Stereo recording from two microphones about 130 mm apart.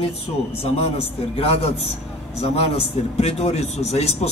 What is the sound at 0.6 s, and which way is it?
A man's voice, 50° left (ahead or behind).